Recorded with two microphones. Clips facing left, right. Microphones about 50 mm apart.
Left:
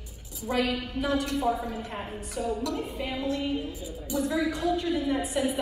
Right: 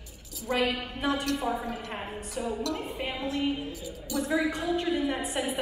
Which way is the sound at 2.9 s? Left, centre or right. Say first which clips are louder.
Left 1 dB; right.